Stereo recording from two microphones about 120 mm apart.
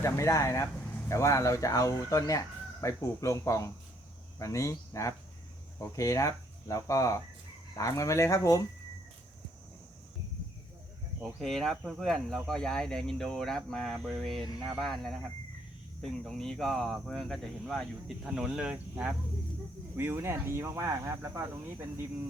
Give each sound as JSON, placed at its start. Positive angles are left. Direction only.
{"t": 0.0, "sound": "speech", "side_deg": 25}
{"t": 11.3, "sound": "speech", "side_deg": 5}